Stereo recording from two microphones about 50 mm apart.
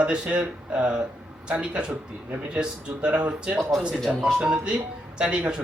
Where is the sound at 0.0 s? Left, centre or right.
Right.